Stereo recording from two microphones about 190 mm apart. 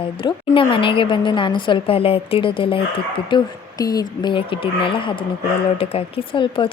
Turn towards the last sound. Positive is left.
turn(degrees=25)  # may be behind; listen again after turning